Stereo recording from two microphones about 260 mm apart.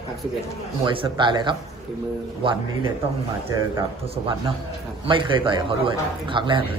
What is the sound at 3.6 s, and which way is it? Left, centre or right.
A man's voice, centre.